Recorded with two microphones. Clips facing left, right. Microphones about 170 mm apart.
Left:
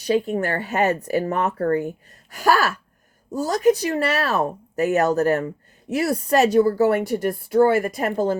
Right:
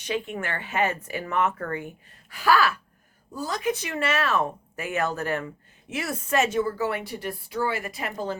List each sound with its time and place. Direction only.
0.0 s a woman's voice: 35° left (ahead or behind)